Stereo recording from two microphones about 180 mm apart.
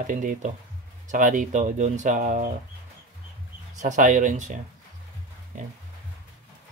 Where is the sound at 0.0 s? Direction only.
45° right (ahead or behind).